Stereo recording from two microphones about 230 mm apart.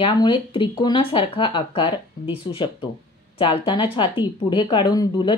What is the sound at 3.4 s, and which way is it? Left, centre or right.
Speech, left.